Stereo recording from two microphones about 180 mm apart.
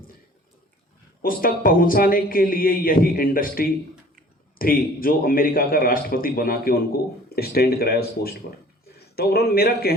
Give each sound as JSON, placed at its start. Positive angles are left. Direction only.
{"t": 1.2, "sound": "a man's voice", "side_deg": 55}